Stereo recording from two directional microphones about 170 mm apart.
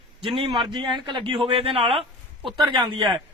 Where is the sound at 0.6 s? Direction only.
25° right (ahead or behind).